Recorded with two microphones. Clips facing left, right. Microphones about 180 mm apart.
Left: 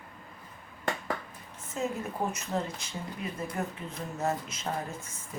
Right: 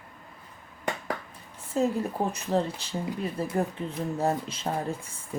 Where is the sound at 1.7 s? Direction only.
35° right (ahead or behind).